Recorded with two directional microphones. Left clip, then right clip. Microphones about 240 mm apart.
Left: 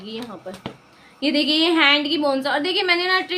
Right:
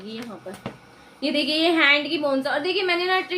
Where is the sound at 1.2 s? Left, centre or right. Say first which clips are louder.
Left 3 dB; left.